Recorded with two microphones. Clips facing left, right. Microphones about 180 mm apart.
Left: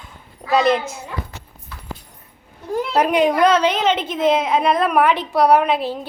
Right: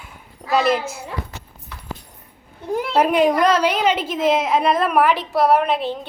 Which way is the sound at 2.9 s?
5° right (ahead or behind).